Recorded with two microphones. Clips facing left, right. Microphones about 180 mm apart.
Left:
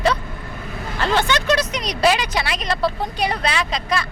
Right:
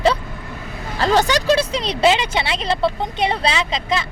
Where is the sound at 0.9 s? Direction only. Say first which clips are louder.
Right 3 dB; 40° right (ahead or behind).